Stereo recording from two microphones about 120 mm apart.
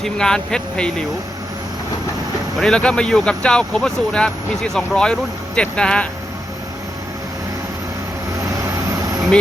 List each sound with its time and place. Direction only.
0.0 s speech: 5° left (ahead or behind)
2.6 s speech: 5° left (ahead or behind)
8.6 s vehicle: 25° right (ahead or behind)